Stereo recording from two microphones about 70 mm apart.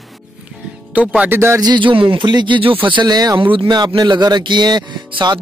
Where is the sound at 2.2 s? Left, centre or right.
Right.